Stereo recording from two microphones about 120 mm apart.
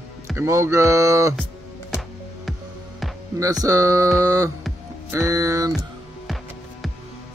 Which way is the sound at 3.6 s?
25° right (ahead or behind).